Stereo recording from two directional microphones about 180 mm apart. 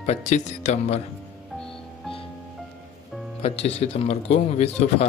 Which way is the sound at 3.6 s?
35° left (ahead or behind).